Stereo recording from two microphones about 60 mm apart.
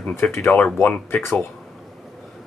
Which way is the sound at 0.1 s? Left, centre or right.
Left.